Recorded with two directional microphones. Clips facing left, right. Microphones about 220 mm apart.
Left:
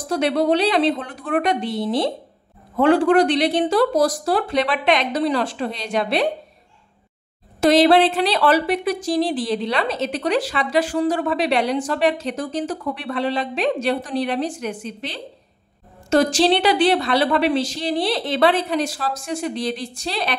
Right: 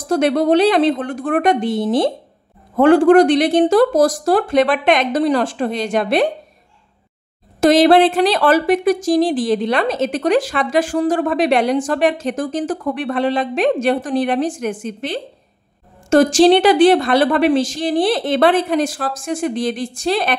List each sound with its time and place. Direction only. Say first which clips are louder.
0.1 s a woman's voice: right 5 dB; 50° right (ahead or behind)
7.6 s a woman's voice: right 3 dB; 45° right (ahead or behind)